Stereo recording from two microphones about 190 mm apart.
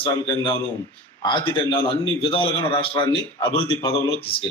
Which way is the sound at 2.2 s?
30° left (ahead or behind).